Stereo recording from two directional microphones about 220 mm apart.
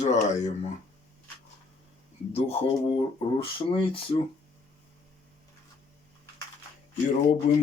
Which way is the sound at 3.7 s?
25° left (ahead or behind).